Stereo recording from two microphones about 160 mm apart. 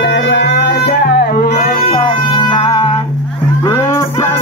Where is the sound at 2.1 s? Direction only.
30° left (ahead or behind).